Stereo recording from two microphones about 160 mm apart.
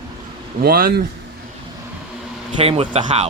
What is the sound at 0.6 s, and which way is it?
Speech, 65° right (ahead or behind).